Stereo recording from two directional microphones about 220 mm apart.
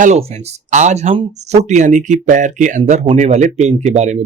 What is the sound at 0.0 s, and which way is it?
Speech, 30° right (ahead or behind).